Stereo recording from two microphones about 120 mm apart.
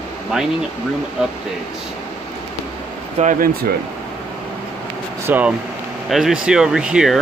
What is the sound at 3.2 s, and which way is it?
Speech, 75° right (ahead or behind).